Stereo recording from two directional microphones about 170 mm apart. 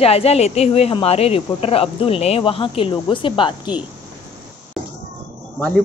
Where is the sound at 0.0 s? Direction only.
35° left (ahead or behind).